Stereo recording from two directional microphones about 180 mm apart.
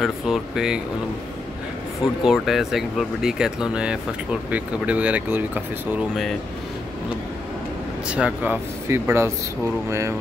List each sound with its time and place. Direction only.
0.0 s speech: centre (ahead or behind)
2.2 s speech: centre (ahead or behind)
8.1 s speech: 5° right (ahead or behind)